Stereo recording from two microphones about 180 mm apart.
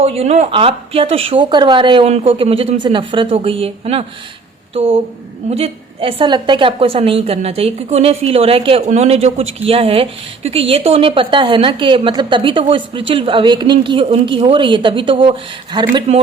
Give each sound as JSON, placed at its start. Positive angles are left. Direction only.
{"t": 0.0, "sound": "a woman's voice", "side_deg": -35}